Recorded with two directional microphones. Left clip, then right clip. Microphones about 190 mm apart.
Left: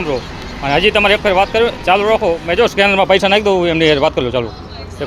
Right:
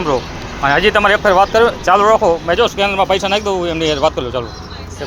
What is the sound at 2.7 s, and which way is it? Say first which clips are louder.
Speech: left 3 dB; 50° left (ahead or behind).